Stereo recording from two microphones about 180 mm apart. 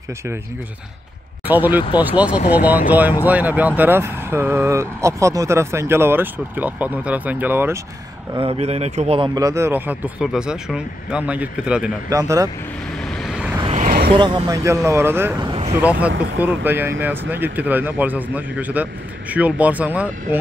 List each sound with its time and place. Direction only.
1.5 s speech: 10° right (ahead or behind)
8.4 s speech: 35° right (ahead or behind); by 11.9 s 5° right (ahead or behind)
12.1 s speech: 15° right (ahead or behind)
13.0 s vehicle: centre (ahead or behind)
13.6 s vehicle: 35° right (ahead or behind)
14.1 s speech: 25° right (ahead or behind); by 20.3 s 10° right (ahead or behind)